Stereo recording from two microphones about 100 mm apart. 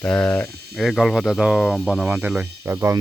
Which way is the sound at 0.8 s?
Centre (ahead or behind).